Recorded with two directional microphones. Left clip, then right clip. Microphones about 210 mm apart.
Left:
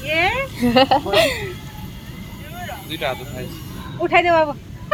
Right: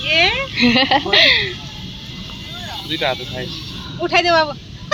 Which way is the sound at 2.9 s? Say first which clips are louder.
Right 5 dB; 25° right (ahead or behind).